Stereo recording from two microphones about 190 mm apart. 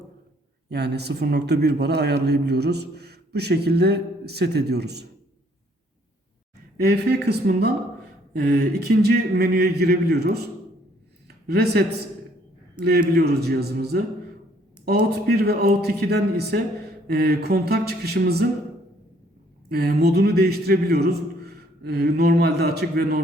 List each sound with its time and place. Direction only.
0.7 s a man's voice: 60° right (ahead or behind)
6.7 s a man's voice: 55° right (ahead or behind)
11.4 s a man's voice: 60° right (ahead or behind)
19.7 s a man's voice: 55° right (ahead or behind)